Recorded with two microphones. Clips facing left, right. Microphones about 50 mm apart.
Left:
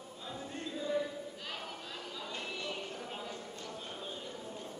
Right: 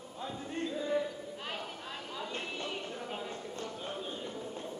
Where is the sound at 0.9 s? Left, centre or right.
Right.